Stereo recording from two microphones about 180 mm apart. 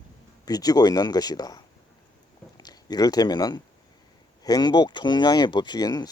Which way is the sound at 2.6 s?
20° left (ahead or behind).